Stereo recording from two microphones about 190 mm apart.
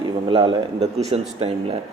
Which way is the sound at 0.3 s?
30° right (ahead or behind).